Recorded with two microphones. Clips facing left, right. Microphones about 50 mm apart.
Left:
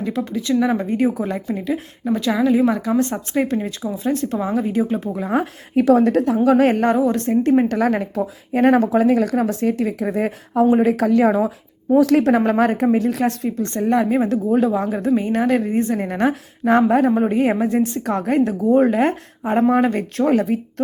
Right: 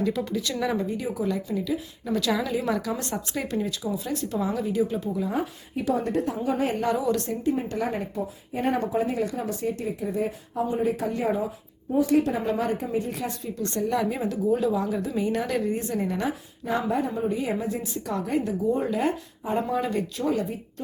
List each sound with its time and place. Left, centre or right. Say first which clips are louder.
0.0 s a woman's voice: left 3 dB; left
0.9 s a woman's voice: left 8 dB; left
2.0 s a woman's voice: left 8 dB; left
6.9 s a woman's voice: left 7 dB; left
7.4 s speech: left 11 dB; left
7.8 s speech: left 9 dB; left
13.6 s a woman's voice: left 6 dB; left